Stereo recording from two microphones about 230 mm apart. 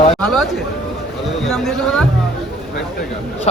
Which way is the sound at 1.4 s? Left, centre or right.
Centre.